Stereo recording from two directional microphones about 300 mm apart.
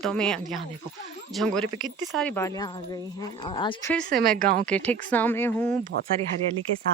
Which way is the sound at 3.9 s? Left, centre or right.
Centre.